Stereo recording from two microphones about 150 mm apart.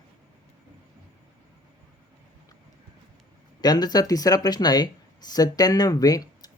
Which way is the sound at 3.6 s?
25° left (ahead or behind).